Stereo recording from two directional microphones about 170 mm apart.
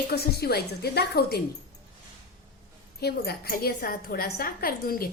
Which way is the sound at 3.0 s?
65° left (ahead or behind).